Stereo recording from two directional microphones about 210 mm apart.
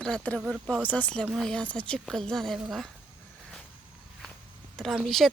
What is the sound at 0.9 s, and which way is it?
Speech, 5° left (ahead or behind).